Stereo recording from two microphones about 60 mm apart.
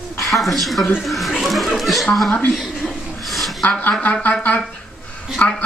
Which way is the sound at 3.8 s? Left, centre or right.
Left.